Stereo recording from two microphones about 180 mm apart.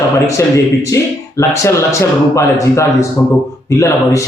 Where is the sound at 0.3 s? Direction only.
15° left (ahead or behind).